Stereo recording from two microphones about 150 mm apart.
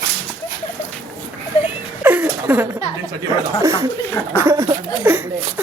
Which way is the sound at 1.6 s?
10° right (ahead or behind).